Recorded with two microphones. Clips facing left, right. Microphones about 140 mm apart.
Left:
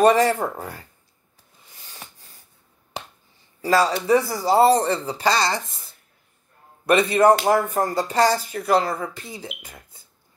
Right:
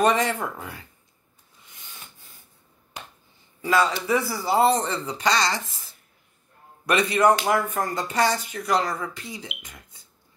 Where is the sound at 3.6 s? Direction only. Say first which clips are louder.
Left 3 dB; 35° left (ahead or behind).